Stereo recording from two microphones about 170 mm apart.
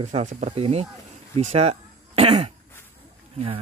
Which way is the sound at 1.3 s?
35° right (ahead or behind).